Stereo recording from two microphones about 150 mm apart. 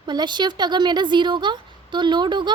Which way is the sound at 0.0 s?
30° right (ahead or behind).